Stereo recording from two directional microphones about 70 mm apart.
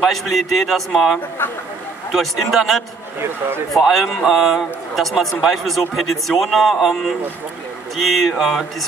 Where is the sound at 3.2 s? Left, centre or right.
Right.